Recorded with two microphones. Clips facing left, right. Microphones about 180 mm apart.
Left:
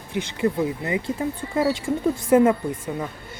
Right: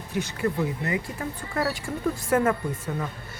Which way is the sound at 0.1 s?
20° left (ahead or behind).